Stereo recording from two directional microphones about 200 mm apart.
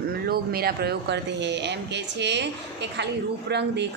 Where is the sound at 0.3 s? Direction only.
50° right (ahead or behind).